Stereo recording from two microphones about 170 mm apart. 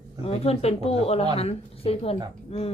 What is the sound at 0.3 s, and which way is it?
A woman's voice, 35° left (ahead or behind).